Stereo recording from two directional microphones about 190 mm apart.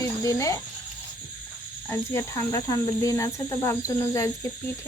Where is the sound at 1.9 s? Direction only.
15° left (ahead or behind).